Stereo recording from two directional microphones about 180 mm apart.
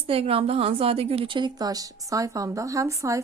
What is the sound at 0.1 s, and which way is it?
A woman's voice, 30° right (ahead or behind).